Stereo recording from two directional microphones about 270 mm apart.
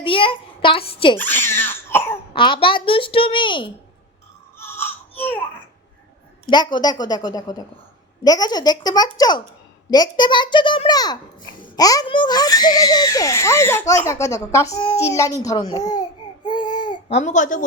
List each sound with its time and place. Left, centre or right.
0.0 s a child's voice: centre
1.2 s cough: centre
2.3 s a child's voice: centre
4.5 s baby cry: centre
6.4 s a child's voice: centre